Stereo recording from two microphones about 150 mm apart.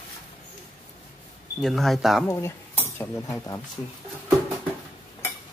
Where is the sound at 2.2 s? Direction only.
15° left (ahead or behind).